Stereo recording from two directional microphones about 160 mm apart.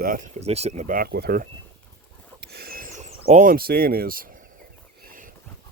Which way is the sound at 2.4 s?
75° right (ahead or behind).